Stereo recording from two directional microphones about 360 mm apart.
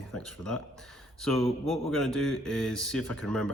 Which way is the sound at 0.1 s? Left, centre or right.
Centre.